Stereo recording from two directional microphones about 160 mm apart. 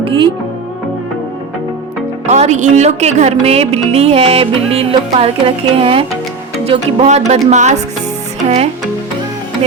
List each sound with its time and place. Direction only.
0.0 s speech: 35° right (ahead or behind)
2.2 s music: 45° right (ahead or behind)
6.7 s speech: 45° right (ahead or behind)
8.4 s music: 40° right (ahead or behind)